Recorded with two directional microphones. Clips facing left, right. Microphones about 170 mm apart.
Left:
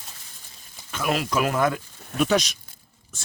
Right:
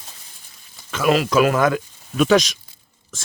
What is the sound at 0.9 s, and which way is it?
Speech, 90° right.